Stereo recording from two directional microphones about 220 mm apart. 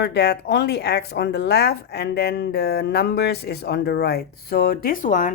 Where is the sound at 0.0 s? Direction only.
50° left (ahead or behind).